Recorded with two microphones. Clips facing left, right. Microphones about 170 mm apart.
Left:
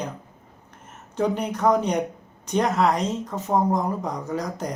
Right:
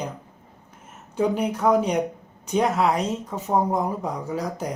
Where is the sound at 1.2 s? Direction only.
10° right (ahead or behind).